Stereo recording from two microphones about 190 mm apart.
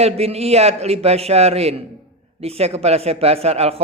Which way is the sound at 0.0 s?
35° right (ahead or behind).